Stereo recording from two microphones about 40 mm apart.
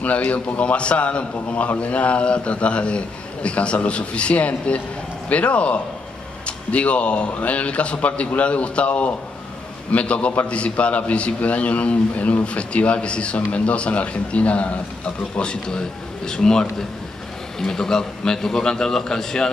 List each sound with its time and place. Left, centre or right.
0.0 s a man's voice: left
15.3 s a man's voice: centre